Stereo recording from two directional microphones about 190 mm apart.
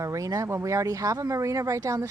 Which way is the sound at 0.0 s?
15° right (ahead or behind).